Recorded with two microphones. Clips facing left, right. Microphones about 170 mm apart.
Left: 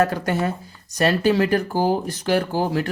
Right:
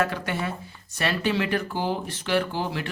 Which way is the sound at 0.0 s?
40° left (ahead or behind).